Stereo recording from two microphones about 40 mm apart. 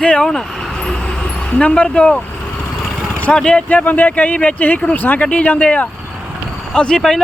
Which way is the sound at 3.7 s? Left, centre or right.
Left.